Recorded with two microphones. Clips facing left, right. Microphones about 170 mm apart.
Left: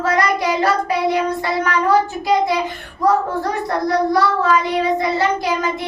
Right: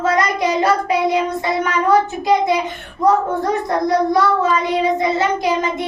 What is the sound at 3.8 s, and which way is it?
Child singing, 20° right (ahead or behind).